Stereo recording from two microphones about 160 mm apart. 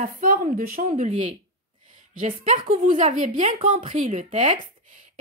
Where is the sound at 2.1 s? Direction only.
50° right (ahead or behind).